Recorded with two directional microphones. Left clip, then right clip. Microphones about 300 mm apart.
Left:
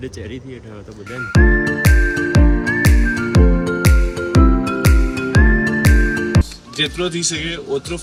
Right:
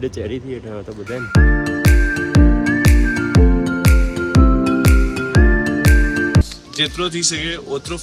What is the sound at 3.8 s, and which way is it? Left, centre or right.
Music, centre.